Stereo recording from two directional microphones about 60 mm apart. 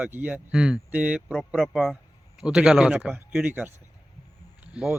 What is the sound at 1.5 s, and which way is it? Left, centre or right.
Speech, centre.